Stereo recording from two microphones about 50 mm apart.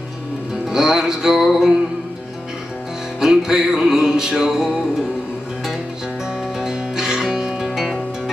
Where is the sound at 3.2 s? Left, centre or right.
Centre.